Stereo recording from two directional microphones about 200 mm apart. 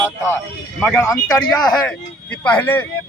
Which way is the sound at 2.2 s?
5° left (ahead or behind).